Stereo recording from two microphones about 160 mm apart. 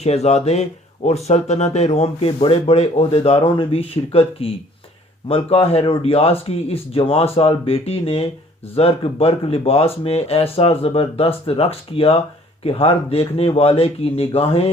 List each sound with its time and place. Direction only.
0.0 s speech: 40° left (ahead or behind)